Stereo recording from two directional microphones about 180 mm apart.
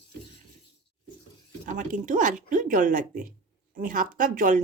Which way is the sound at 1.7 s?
45° right (ahead or behind).